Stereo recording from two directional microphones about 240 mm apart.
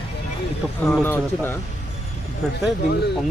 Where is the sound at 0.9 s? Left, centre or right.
Centre.